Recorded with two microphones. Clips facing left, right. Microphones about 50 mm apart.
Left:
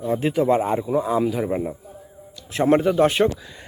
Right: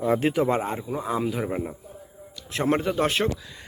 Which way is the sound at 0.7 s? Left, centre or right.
Centre.